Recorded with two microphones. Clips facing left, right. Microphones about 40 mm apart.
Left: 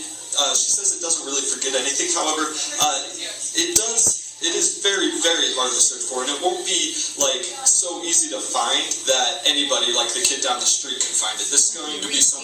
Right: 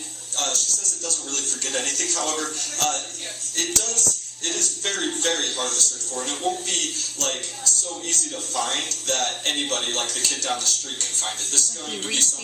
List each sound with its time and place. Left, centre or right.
0.3 s a man's voice: left